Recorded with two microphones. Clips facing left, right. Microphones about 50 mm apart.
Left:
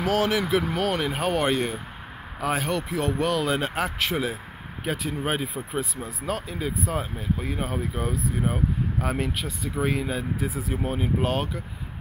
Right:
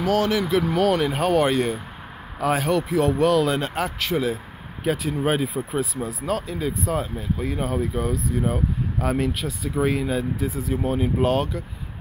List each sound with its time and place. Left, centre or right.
0.0 s speech: left
0.7 s speech: centre
3.6 s speech: left
4.8 s speech: centre
6.2 s speech: centre
7.0 s speech: left
10.4 s speech: left
11.0 s speech: centre